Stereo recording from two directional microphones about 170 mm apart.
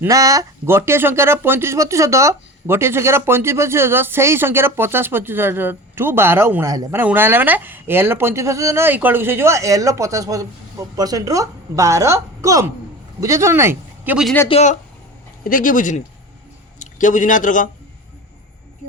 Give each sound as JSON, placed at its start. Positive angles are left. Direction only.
{"t": 0.0, "sound": "speech", "side_deg": -20}
{"t": 14.4, "sound": "speech", "side_deg": 40}
{"t": 15.4, "sound": "a man's voice", "side_deg": 55}